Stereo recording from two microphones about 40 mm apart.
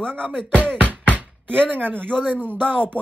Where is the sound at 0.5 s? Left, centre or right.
Right.